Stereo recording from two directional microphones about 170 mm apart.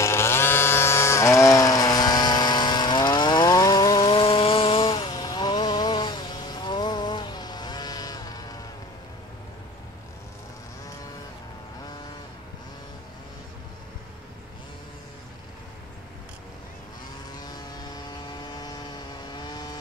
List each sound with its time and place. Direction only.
0.0 s chainsaw: 15° left (ahead or behind)
4.1 s chainsaw: 35° left (ahead or behind)
18.5 s vehicle: 25° left (ahead or behind)